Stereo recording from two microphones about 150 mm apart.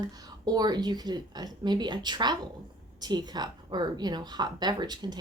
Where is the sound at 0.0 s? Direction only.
25° right (ahead or behind).